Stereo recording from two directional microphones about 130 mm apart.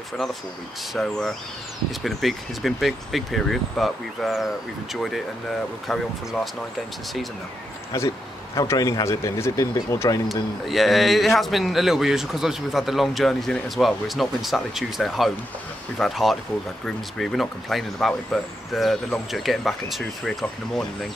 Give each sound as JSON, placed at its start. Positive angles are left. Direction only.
{"t": 0.9, "sound": "speech", "side_deg": 5}
{"t": 5.9, "sound": "speech", "side_deg": 0}
{"t": 8.5, "sound": "speech", "side_deg": 25}
{"t": 10.6, "sound": "speech", "side_deg": 0}